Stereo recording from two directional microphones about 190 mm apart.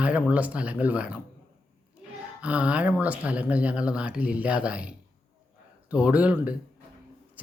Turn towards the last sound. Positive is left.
turn(degrees=-10)  # may be behind; listen again after turning